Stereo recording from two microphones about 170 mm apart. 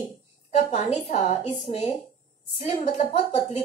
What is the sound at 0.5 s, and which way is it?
A woman's voice, 40° left (ahead or behind).